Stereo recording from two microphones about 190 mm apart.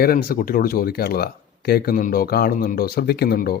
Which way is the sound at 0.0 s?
50° left (ahead or behind).